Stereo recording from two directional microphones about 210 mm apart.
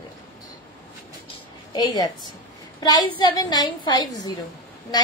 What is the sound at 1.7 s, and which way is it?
A woman's voice, 20° left (ahead or behind).